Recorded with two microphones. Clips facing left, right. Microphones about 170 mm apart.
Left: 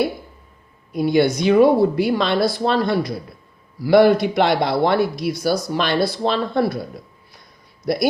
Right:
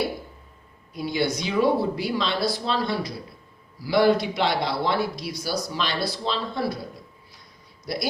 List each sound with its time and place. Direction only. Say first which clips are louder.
0.9 s speech: left 9 dB; 55° left (ahead or behind)
7.9 s speech: left 9 dB; 55° left (ahead or behind)